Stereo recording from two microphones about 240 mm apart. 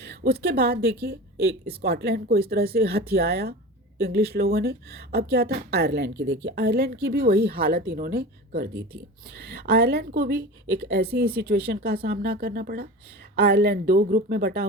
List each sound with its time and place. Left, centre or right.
0.0 s a woman's voice: right